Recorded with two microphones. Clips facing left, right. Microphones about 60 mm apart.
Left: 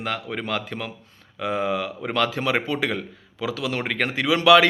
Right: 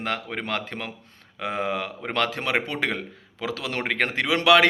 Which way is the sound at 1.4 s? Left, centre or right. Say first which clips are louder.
Left 3 dB; right.